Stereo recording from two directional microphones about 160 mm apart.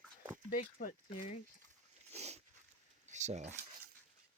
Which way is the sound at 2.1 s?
40° right (ahead or behind).